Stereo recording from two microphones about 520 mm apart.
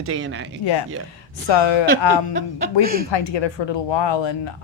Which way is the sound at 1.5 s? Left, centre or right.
Left.